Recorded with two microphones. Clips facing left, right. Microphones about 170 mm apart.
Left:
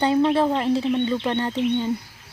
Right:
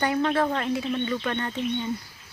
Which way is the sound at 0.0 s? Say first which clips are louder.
Left 5 dB; 20° left (ahead or behind).